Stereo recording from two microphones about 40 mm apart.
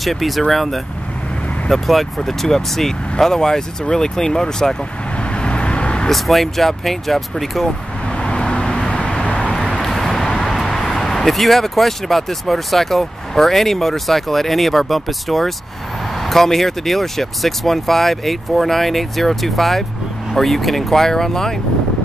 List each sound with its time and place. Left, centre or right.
0.0 s speech: centre
5.3 s vehicle: left
6.0 s speech: centre
8.2 s vehicle: left
9.3 s vehicle: centre
10.4 s speech: centre